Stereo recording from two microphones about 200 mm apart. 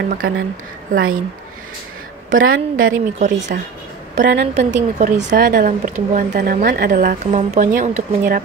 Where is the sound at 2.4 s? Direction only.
85° right.